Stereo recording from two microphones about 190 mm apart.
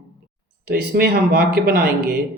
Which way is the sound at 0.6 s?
55° right (ahead or behind).